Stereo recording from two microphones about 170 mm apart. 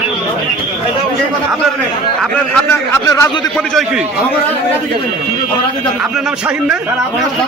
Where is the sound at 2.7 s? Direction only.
15° left (ahead or behind).